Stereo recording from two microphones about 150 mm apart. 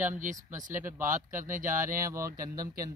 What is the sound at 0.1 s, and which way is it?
Speech, 60° right (ahead or behind).